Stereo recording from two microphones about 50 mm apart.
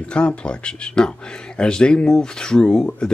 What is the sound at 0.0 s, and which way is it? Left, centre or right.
Speech, left.